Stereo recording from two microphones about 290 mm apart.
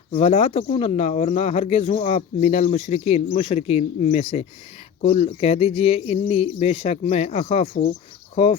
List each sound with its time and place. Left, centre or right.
0.1 s speech: left